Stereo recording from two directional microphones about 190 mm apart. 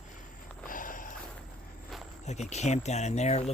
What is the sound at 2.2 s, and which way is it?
Speech, 35° left (ahead or behind).